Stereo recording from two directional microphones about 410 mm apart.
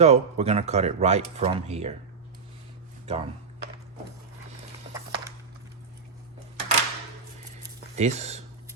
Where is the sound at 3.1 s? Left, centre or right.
Centre.